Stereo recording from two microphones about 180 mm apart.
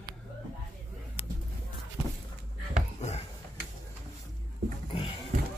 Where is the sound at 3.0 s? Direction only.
40° left (ahead or behind).